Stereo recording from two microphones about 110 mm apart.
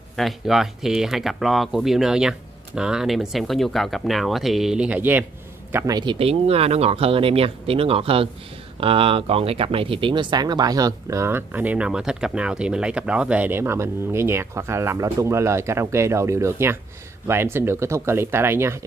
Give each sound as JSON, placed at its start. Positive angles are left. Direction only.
{"t": 0.1, "sound": "speech", "side_deg": 0}
{"t": 5.9, "sound": "speech", "side_deg": -40}
{"t": 6.1, "sound": "speech", "side_deg": -65}